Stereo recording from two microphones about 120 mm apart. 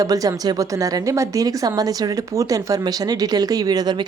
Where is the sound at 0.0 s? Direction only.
30° right (ahead or behind).